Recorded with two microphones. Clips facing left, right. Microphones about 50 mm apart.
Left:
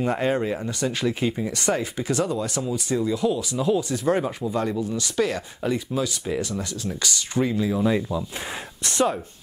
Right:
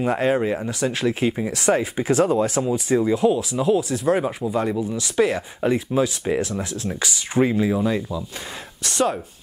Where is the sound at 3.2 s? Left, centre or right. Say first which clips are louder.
Right 4 dB; centre.